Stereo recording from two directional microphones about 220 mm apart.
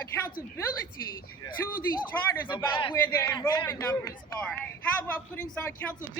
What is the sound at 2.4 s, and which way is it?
A man's voice, 20° left (ahead or behind).